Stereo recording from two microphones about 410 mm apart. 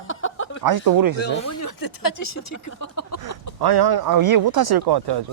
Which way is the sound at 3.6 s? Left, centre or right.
Right.